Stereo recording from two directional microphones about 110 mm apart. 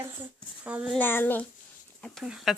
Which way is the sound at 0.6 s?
10° right (ahead or behind).